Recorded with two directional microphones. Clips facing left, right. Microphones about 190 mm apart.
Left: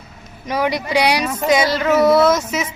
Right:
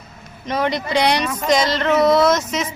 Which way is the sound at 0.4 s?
10° left (ahead or behind).